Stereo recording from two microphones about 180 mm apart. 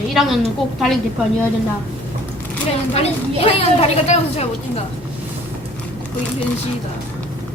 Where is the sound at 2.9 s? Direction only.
35° left (ahead or behind).